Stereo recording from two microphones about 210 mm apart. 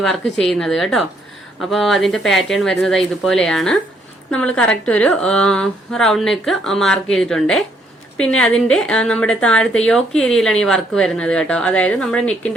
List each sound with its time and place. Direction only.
0.0 s a woman's voice: centre (ahead or behind)